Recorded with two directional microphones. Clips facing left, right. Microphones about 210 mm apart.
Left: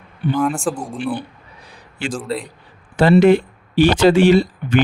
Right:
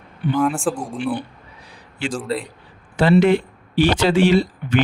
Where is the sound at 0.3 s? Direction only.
5° right (ahead or behind).